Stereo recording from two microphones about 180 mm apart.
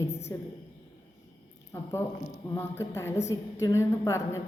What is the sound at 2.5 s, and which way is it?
Speech, 15° left (ahead or behind).